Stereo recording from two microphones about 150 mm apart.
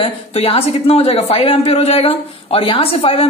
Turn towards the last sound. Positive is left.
turn(degrees=40)  # may be behind; listen again after turning